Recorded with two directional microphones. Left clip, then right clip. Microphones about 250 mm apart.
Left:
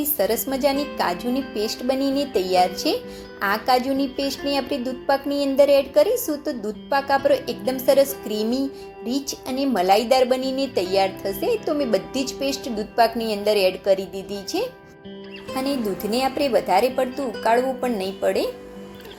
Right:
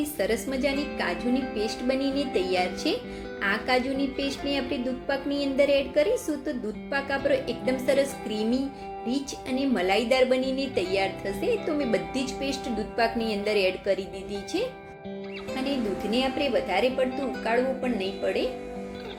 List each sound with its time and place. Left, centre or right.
0.2 s a woman's voice: centre
15.6 s a woman's voice: centre